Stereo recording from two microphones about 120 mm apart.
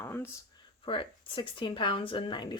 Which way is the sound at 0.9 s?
45° left (ahead or behind).